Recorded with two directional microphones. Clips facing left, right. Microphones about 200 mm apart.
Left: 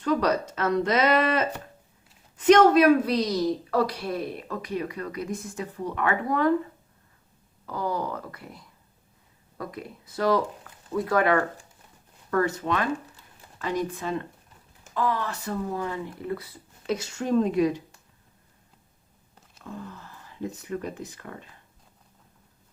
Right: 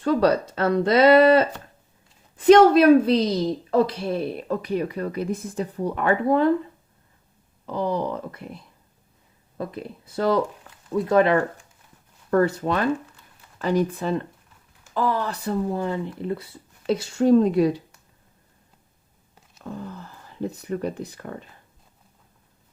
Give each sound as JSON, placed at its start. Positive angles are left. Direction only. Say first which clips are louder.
{"t": 0.0, "sound": "a woman's voice", "louder": "right 4 dB", "side_deg": -30}
{"t": 7.7, "sound": "a woman's voice", "louder": "right 4 dB", "side_deg": -25}
{"t": 19.6, "sound": "speech", "louder": "right 4 dB", "side_deg": -35}